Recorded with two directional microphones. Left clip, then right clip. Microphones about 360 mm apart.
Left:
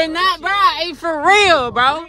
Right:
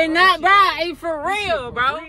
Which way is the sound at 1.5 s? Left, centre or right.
Centre.